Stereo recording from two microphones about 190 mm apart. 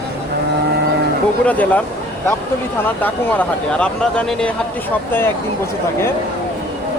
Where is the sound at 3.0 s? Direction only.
5° left (ahead or behind).